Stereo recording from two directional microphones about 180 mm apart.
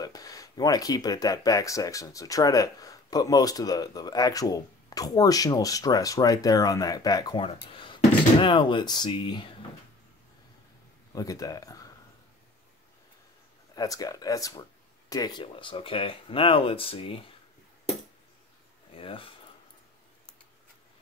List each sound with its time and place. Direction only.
0.0 s speech: 20° left (ahead or behind)
11.1 s speech: 20° left (ahead or behind)
13.7 s speech: 20° left (ahead or behind)
18.9 s speech: 30° left (ahead or behind)